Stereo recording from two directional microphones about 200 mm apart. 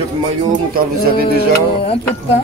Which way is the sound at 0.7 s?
45° right (ahead or behind).